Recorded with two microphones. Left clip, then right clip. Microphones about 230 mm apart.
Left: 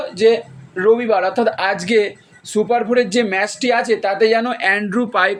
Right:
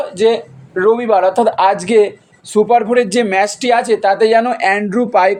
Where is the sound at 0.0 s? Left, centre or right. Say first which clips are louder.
Right 1 dB; right.